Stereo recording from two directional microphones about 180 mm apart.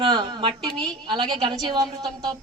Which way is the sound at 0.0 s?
25° right (ahead or behind).